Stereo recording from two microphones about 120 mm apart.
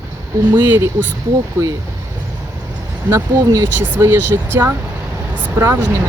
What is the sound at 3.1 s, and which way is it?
Speech, 20° right (ahead or behind).